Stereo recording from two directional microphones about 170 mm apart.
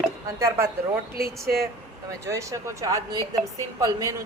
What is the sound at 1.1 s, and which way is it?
Speech, 60° right (ahead or behind).